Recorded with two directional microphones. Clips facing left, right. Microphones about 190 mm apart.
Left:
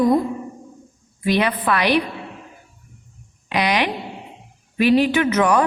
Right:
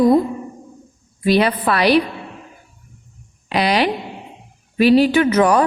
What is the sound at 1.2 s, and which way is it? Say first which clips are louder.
Speech: right 4 dB; 35° right (ahead or behind).